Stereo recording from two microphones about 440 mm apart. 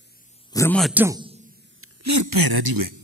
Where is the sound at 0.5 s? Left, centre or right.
Centre.